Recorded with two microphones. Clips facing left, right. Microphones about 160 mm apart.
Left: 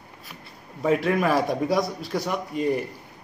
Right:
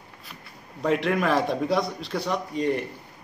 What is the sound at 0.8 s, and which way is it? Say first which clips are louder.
A man's voice: left 2 dB; 5° left (ahead or behind).